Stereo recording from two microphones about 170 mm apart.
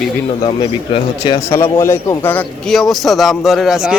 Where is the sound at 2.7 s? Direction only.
Centre (ahead or behind).